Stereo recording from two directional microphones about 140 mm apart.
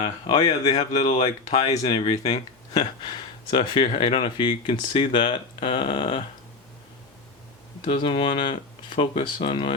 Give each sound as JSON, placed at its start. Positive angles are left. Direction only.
{"t": 0.0, "sound": "speech", "side_deg": 30}
{"t": 0.7, "sound": "speech", "side_deg": 55}
{"t": 1.0, "sound": "speech", "side_deg": 35}
{"t": 7.9, "sound": "speech", "side_deg": 35}